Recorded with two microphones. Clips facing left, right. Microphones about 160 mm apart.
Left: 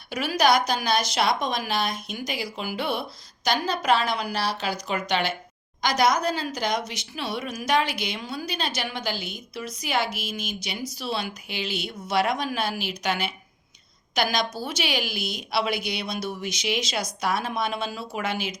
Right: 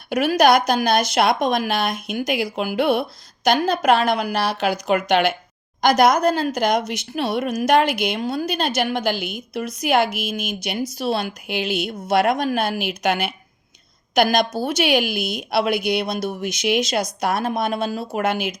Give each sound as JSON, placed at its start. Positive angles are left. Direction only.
{"t": 0.1, "sound": "a woman's voice", "side_deg": -50}